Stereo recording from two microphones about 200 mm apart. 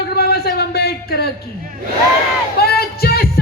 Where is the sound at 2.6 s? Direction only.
50° left (ahead or behind).